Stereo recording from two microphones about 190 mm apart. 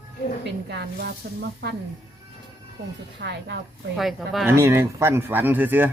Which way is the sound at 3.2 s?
60° right (ahead or behind).